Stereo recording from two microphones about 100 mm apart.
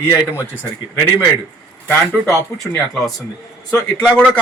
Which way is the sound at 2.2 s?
15° right (ahead or behind).